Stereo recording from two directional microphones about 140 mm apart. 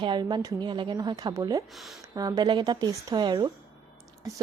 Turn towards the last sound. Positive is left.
turn(degrees=-30)  # may be behind; listen again after turning